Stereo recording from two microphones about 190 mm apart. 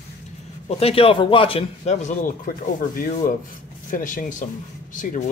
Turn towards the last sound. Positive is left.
turn(degrees=45)  # may be behind; listen again after turning